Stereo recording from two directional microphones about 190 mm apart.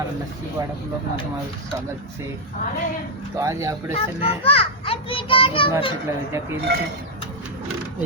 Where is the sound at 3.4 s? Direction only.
15° right (ahead or behind).